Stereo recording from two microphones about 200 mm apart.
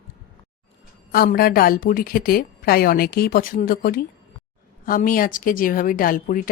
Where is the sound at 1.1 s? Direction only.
50° left (ahead or behind).